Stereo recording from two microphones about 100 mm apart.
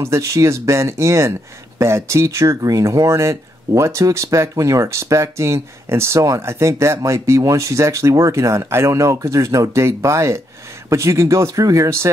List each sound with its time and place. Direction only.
0.0 s speech: 30° right (ahead or behind)